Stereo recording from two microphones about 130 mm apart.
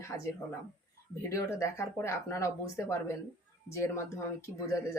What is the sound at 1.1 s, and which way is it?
Speech, 25° left (ahead or behind).